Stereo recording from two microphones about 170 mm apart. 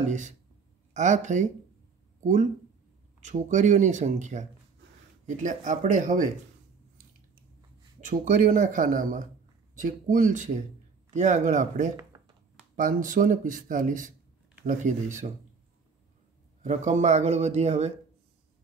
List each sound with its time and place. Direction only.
0.9 s speech: 45° right (ahead or behind)
3.2 s speech: 45° right (ahead or behind)
8.0 s speech: 50° right (ahead or behind)
16.6 s speech: 45° right (ahead or behind)